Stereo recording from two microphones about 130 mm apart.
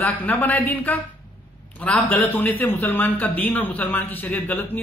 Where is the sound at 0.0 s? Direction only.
15° left (ahead or behind).